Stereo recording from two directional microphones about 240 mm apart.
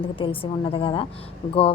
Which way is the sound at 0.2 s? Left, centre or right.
Left.